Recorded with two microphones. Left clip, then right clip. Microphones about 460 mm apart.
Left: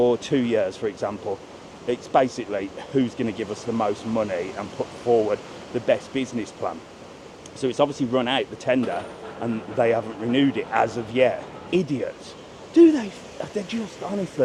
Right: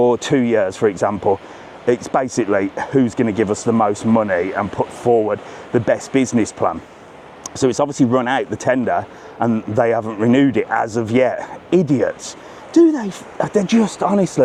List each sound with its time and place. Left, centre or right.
0.0 s speech: right